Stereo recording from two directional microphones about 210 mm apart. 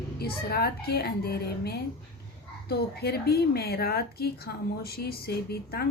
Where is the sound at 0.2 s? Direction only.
50° left (ahead or behind).